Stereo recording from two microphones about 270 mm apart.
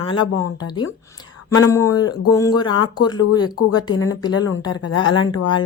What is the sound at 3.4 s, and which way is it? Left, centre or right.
Speech, left.